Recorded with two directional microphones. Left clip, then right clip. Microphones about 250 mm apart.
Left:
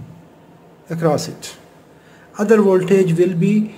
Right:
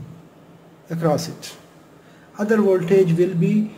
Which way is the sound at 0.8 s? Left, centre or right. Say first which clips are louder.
Left 3 dB; centre.